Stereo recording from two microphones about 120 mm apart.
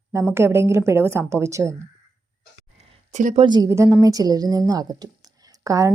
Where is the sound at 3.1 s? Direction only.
90° right.